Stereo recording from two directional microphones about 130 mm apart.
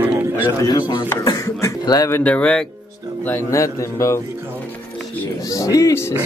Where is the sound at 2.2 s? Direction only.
10° left (ahead or behind).